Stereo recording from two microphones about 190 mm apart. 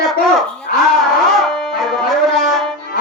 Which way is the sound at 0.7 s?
50° left (ahead or behind).